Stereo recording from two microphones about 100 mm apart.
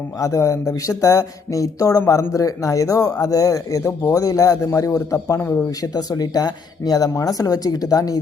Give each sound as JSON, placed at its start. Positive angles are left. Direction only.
{"t": 0.2, "sound": "speech", "side_deg": 30}
{"t": 5.8, "sound": "speech", "side_deg": 40}